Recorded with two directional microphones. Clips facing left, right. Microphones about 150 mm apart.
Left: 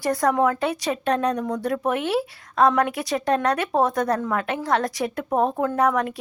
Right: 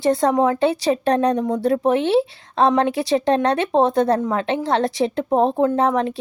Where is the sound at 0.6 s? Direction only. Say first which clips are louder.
Right 6 dB; 30° right (ahead or behind).